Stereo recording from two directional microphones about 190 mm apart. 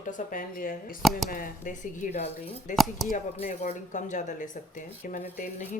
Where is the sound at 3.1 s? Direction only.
40° left (ahead or behind).